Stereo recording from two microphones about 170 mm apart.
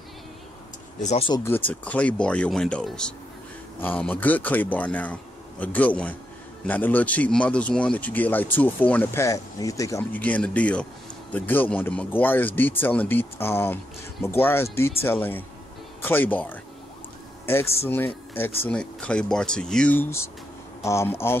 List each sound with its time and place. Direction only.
1.0 s speech: 40° left (ahead or behind)
1.3 s speech: 15° left (ahead or behind)
17.8 s speech: 10° left (ahead or behind)